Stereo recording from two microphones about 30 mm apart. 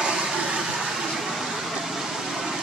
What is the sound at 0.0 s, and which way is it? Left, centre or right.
Vehicle, right.